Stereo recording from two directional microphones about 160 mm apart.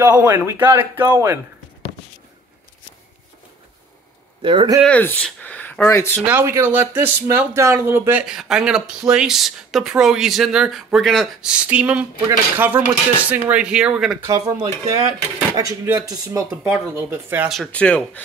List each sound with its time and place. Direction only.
0.0 s cutlery: 10° right (ahead or behind)
4.4 s speech: 30° right (ahead or behind)
4.8 s speech: 10° left (ahead or behind)
6.2 s speech: 15° right (ahead or behind)
12.3 s cutlery: 10° right (ahead or behind)
14.9 s speech: 20° right (ahead or behind)
16.4 s cutlery: 10° right (ahead or behind)
17.5 s speech: 5° left (ahead or behind)